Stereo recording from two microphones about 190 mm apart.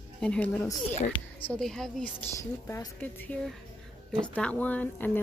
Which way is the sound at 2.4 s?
15° left (ahead or behind).